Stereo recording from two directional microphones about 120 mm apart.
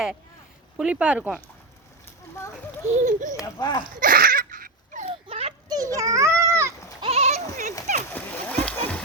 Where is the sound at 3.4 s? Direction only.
30° left (ahead or behind).